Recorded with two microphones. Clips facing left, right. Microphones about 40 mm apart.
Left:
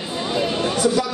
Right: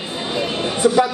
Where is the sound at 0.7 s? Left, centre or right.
Right.